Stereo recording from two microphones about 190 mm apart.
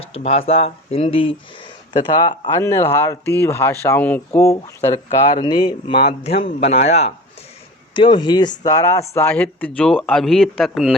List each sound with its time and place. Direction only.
0.0 s speech: 30° left (ahead or behind); by 10.9 s centre (ahead or behind)